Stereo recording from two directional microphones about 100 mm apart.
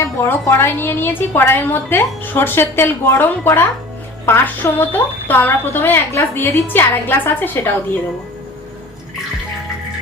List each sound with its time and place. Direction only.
0.0 s a woman's voice: 25° left (ahead or behind)